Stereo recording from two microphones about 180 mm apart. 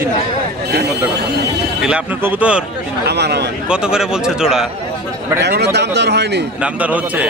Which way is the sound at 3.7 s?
5° right (ahead or behind).